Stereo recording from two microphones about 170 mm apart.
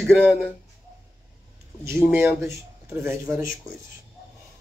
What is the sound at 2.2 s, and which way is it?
Speech, 15° right (ahead or behind).